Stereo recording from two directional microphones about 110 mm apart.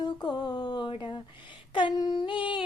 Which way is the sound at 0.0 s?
45° left (ahead or behind).